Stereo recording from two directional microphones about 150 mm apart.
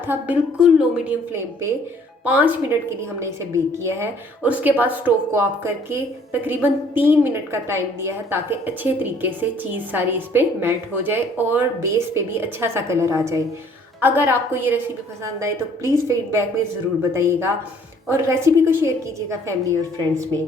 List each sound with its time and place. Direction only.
0.1 s a woman's voice: 5° right (ahead or behind)
2.2 s a woman's voice: 10° right (ahead or behind)